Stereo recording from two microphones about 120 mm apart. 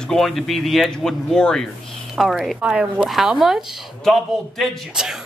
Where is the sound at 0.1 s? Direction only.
Centre (ahead or behind).